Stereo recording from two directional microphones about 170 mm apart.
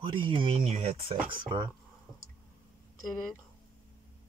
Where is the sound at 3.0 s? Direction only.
Centre (ahead or behind).